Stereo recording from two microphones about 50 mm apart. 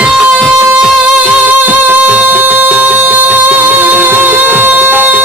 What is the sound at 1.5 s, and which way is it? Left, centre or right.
Music, right.